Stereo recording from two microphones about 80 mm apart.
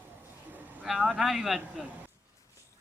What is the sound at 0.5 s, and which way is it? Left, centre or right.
Vehicle, right.